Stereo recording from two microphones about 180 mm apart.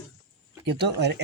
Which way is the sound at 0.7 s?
70° right (ahead or behind).